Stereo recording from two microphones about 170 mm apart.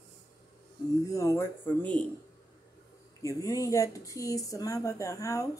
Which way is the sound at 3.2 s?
20° left (ahead or behind).